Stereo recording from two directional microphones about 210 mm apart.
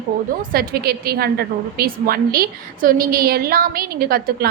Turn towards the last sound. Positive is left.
turn(degrees=-45)  # may be behind; listen again after turning